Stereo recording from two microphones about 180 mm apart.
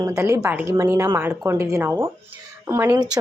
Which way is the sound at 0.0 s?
15° right (ahead or behind).